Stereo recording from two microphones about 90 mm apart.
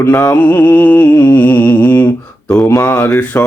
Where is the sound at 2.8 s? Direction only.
25° left (ahead or behind).